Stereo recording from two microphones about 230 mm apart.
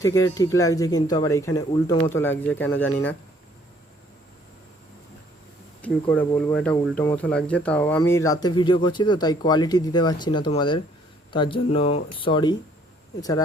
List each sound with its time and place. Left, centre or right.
0.0 s speech: centre
5.8 s speech: centre